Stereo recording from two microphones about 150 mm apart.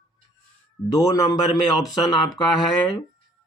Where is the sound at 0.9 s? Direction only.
25° left (ahead or behind).